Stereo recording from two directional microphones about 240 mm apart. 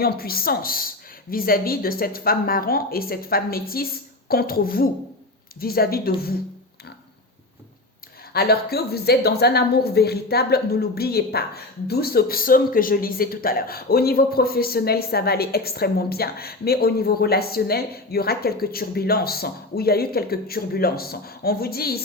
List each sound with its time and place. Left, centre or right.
0.0 s a woman's voice: left
8.3 s a woman's voice: left